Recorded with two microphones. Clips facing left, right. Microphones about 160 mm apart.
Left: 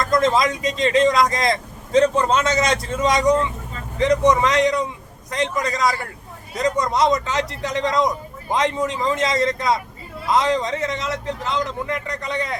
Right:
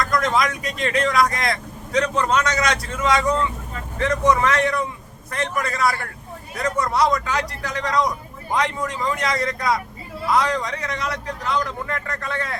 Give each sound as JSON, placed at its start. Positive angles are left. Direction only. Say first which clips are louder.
{"t": 0.0, "sound": "speech", "louder": "left 3 dB", "side_deg": 25}